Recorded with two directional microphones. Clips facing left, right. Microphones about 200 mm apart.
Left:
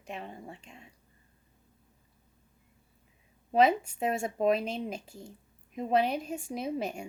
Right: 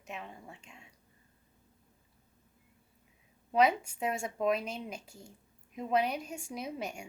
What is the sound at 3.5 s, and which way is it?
A woman's voice, 30° left (ahead or behind).